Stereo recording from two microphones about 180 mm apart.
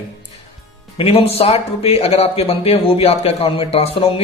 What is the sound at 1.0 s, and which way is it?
Speech, 30° left (ahead or behind).